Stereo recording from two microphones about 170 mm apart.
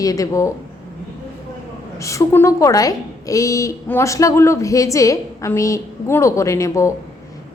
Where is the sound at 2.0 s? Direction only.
20° left (ahead or behind).